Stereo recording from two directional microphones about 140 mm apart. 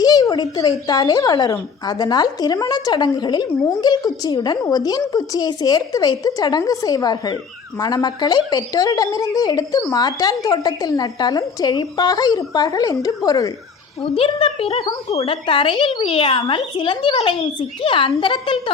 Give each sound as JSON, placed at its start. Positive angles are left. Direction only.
{"t": 0.0, "sound": "speech", "side_deg": 30}
{"t": 14.0, "sound": "speech", "side_deg": 40}